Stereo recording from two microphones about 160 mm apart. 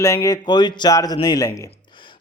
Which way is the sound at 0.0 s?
20° left (ahead or behind).